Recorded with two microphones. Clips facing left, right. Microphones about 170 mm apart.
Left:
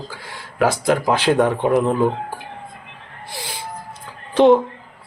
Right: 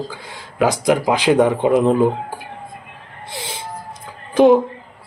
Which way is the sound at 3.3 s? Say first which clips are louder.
Right 2 dB; 20° right (ahead or behind).